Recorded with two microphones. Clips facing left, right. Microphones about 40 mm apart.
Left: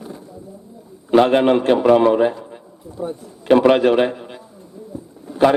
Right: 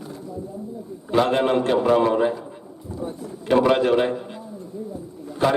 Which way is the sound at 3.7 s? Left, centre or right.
Left.